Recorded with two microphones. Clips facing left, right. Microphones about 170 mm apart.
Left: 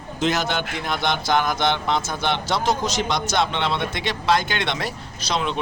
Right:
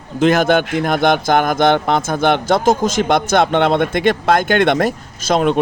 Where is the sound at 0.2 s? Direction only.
55° right (ahead or behind).